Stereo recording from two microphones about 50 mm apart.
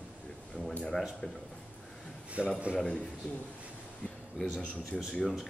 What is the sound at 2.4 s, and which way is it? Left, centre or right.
Speech, right.